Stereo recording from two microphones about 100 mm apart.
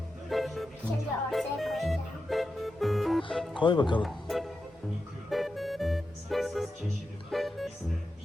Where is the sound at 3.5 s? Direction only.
55° left (ahead or behind).